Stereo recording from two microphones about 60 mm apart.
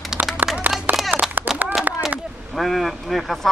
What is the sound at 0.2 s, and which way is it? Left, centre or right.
Clapping, right.